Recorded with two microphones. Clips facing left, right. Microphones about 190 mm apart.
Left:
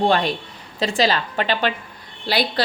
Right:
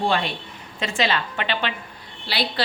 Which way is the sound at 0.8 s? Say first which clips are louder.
Left 4 dB; 35° left (ahead or behind).